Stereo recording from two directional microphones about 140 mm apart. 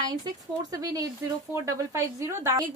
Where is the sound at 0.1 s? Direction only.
25° right (ahead or behind).